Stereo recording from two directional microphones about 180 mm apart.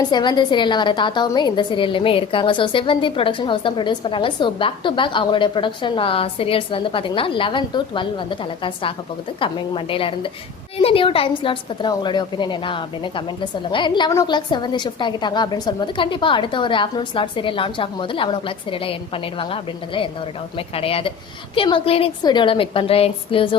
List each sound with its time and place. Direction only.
0.1 s a woman's voice: 25° left (ahead or behind)